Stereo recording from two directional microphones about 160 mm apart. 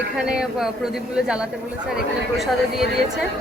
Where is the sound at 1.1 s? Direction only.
5° right (ahead or behind).